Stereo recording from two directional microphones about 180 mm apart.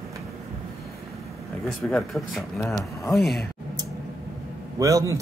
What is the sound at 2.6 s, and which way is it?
Speech, 15° left (ahead or behind).